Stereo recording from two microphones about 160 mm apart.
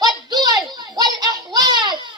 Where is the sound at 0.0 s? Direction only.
25° right (ahead or behind).